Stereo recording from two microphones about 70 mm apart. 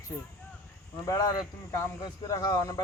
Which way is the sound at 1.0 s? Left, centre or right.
Left.